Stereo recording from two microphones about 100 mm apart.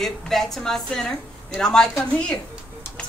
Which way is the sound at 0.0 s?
5° left (ahead or behind).